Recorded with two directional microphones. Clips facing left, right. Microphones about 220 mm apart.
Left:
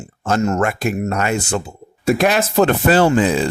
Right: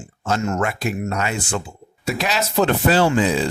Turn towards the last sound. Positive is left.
turn(degrees=55)  # may be behind; listen again after turning